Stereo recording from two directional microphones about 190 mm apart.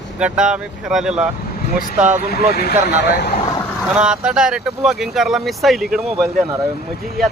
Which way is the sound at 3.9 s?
5° right (ahead or behind).